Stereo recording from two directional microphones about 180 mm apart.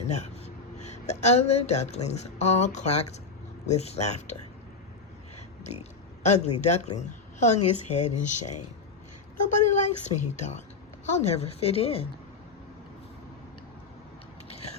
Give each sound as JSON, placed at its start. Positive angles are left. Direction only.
{"t": 0.1, "sound": "a woman's voice", "side_deg": 40}
{"t": 5.6, "sound": "speech", "side_deg": 40}